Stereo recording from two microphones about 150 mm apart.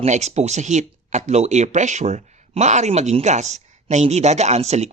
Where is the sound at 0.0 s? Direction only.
50° right (ahead or behind).